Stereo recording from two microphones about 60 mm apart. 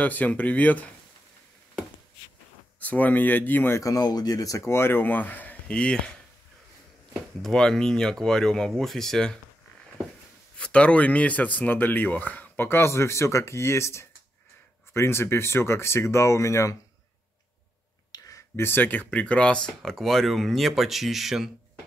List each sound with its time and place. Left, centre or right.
0.0 s speech: left
2.8 s speech: left
3.8 s speech: left
4.6 s speech: left
5.7 s speech: centre
7.4 s speech: centre
10.6 s speech: centre; by 16.7 s left
18.1 s a sound: left
18.6 s speech: left; by 21.5 s centre